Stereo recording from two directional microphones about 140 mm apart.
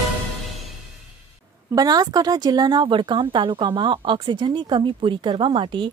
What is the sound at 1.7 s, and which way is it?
Speech, 30° right (ahead or behind).